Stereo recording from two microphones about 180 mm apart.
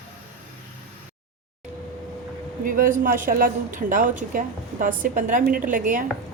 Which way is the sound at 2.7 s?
50° right (ahead or behind).